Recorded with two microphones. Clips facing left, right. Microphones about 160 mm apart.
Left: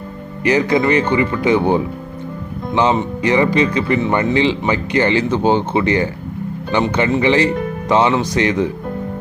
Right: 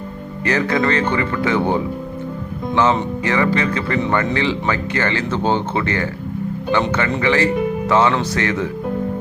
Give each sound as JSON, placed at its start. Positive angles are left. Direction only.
{"t": 0.4, "sound": "speech", "side_deg": 15}
{"t": 7.2, "sound": "speech", "side_deg": 20}